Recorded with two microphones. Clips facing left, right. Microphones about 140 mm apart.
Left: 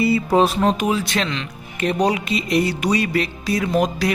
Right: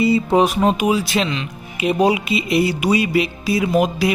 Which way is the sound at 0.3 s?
15° right (ahead or behind).